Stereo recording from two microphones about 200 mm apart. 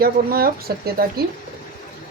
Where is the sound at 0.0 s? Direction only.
50° right (ahead or behind).